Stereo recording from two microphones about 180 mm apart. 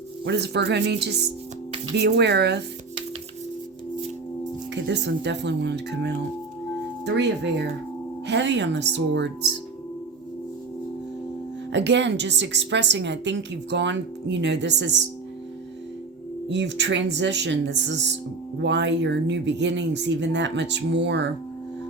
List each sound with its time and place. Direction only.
0.3 s a woman's voice: 70° right (ahead or behind)
4.7 s a woman's voice: 75° right (ahead or behind)
11.7 s a woman's voice: 75° right (ahead or behind)
16.5 s a woman's voice: 80° right